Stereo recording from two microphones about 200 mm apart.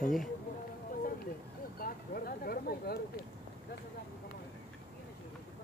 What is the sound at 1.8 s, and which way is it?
Speech, 50° left (ahead or behind).